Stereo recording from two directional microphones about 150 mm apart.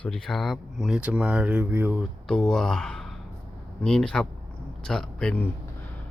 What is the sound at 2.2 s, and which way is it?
Speech, 5° left (ahead or behind).